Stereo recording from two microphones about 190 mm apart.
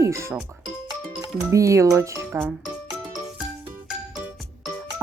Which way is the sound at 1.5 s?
15° right (ahead or behind).